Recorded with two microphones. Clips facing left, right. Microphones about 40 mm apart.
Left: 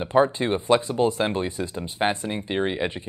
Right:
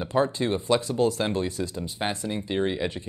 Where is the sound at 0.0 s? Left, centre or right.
Left.